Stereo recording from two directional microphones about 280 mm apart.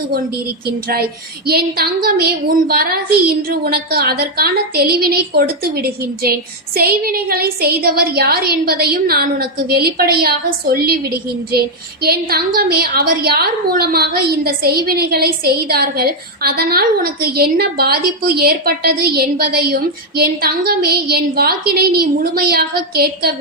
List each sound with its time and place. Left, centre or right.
1.5 s a woman's voice: right
12.0 s a woman's voice: right